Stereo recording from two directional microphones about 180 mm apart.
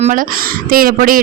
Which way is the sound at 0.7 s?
50° right (ahead or behind).